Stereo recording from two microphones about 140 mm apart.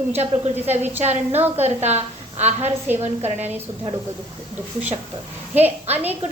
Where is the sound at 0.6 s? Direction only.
15° right (ahead or behind).